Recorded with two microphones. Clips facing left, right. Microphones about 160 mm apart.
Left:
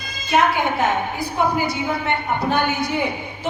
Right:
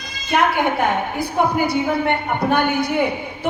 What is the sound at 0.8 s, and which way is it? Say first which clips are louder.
Speech: right 1 dB; 60° right (ahead or behind).